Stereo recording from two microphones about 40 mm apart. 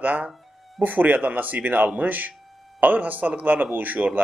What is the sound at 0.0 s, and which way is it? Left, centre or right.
A man's voice, right.